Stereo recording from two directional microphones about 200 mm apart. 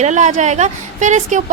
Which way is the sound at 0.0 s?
35° right (ahead or behind).